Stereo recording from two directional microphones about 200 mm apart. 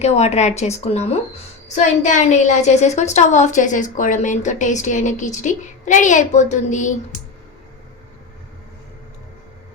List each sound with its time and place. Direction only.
0.0 s a woman's voice: 35° left (ahead or behind)